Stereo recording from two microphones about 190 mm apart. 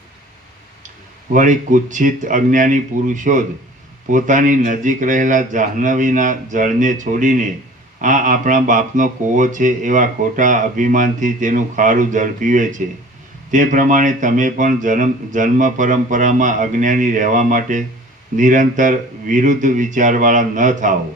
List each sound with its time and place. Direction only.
1.3 s speech: 40° right (ahead or behind)